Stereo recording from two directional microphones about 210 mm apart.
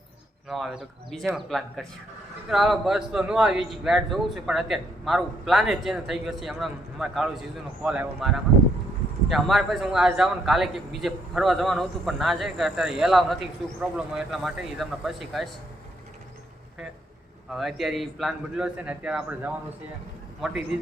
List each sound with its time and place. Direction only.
0.4 s a man's voice: centre (ahead or behind)
17.5 s a man's voice: centre (ahead or behind)